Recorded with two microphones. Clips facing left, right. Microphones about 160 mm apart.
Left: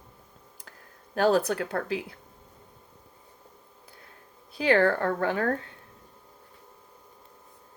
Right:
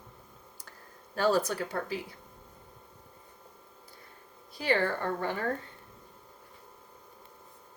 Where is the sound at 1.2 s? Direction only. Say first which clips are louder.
Left 4 dB; 60° left (ahead or behind).